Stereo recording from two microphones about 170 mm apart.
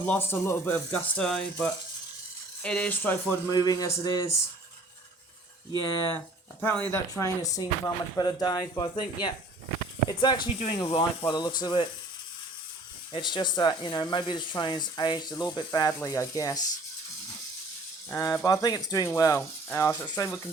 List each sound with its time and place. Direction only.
0.0 s speech: 10° left (ahead or behind)
3.5 s speech: 20° left (ahead or behind)
6.6 s speech: 10° left (ahead or behind); by 11.9 s 25° left (ahead or behind)
13.1 s speech: 25° left (ahead or behind)
18.1 s speech: 15° left (ahead or behind)